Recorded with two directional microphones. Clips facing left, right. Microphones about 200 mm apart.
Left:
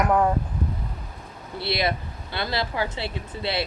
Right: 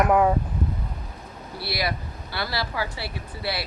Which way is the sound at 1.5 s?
25° left (ahead or behind).